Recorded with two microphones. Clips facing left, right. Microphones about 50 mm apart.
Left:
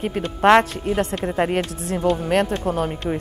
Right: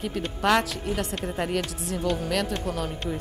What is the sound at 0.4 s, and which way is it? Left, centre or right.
Speech, left.